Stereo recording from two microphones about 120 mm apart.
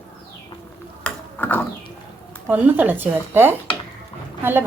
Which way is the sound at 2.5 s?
15° right (ahead or behind).